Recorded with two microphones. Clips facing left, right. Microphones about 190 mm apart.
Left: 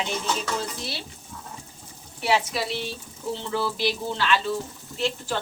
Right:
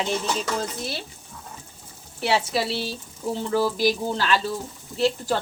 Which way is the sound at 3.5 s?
45° right (ahead or behind).